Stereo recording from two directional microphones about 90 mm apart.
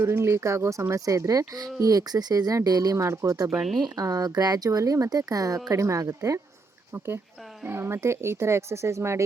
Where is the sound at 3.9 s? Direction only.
40° right (ahead or behind).